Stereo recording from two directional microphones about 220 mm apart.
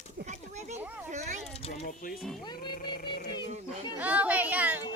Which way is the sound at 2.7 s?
45° left (ahead or behind).